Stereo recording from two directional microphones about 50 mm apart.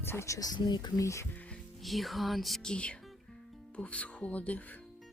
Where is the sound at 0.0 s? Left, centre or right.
Left.